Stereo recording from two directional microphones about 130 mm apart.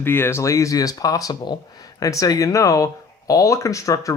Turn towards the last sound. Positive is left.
turn(degrees=25)  # may be behind; listen again after turning